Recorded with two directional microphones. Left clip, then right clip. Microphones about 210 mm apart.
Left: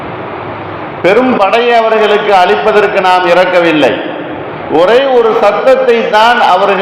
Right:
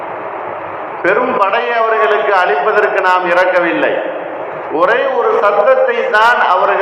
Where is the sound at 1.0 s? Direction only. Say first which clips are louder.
Left 5 dB; 55° left (ahead or behind).